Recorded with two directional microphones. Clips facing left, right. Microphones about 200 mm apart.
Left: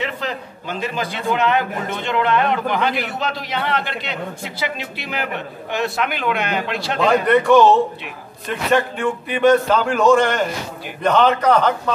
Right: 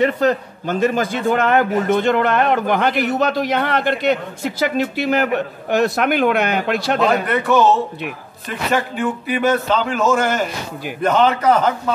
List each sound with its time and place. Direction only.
0.0 s a man's voice: 45° right (ahead or behind)
7.0 s a man's voice: 5° right (ahead or behind)